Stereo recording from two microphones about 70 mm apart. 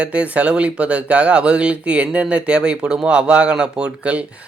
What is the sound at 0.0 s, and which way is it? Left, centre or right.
Speech, centre.